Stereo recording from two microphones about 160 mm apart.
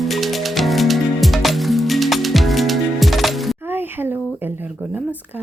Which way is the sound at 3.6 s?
15° right (ahead or behind).